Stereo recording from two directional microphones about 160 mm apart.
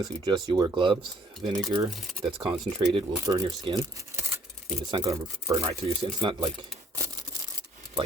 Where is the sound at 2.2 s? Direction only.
35° right (ahead or behind).